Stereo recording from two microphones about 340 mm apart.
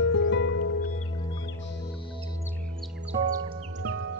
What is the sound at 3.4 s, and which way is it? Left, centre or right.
Music, right.